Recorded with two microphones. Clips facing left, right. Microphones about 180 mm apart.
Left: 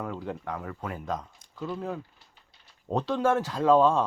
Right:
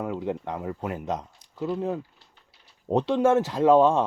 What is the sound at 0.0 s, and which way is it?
Speech, 15° right (ahead or behind).